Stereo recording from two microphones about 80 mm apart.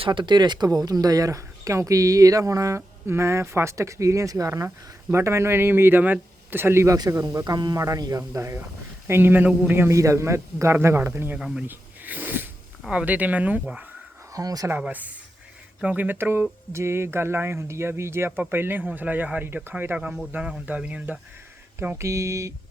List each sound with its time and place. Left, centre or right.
0.0 s speech: right
6.9 s speech: right
8.3 s speech: right
9.9 s speech: right
11.3 s speech: centre
11.6 s a sound: right
12.9 s speech: centre
14.3 s speech: right
14.8 s speech: centre
21.8 s speech: right